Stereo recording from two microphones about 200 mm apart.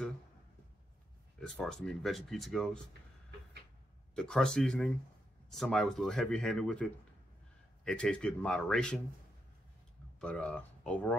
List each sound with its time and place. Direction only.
1.5 s speech: 5° left (ahead or behind)
4.1 s speech: 5° left (ahead or behind)
10.2 s speech: 5° left (ahead or behind)